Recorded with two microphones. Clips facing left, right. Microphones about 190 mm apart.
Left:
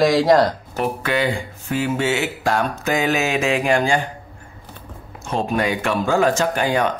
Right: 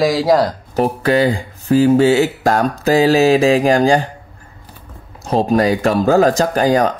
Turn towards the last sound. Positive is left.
turn(degrees=-40)  # may be behind; listen again after turning